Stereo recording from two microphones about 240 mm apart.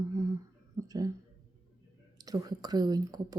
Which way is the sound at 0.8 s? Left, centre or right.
Centre.